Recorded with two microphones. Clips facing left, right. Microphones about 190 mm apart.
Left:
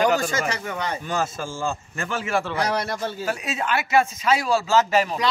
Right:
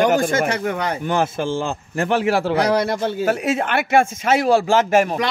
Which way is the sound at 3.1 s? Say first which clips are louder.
Right 8 dB; 55° right (ahead or behind).